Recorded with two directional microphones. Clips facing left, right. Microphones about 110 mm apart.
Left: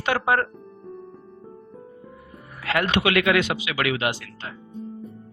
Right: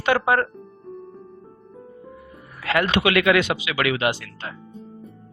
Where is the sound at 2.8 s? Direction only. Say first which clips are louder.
Right 2 dB; 90° right.